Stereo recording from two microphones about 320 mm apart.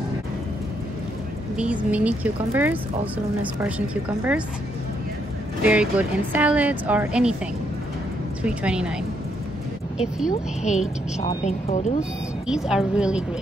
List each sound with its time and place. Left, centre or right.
1.6 s speech: centre
5.6 s speech: centre
8.4 s speech: centre
10.6 s a woman's voice: left
12.0 s speech: centre